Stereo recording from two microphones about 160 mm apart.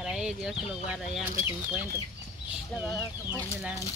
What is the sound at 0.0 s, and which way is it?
Speech, 5° right (ahead or behind).